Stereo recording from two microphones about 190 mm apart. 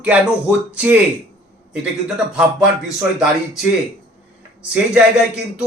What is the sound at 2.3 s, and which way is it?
A man's voice, 5° right (ahead or behind).